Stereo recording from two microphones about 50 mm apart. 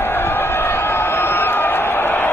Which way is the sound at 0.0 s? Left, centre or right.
Left.